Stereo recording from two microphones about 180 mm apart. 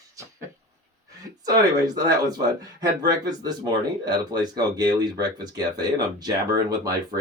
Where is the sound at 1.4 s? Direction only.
20° right (ahead or behind).